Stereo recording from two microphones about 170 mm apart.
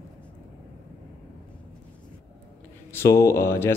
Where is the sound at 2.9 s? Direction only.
15° left (ahead or behind).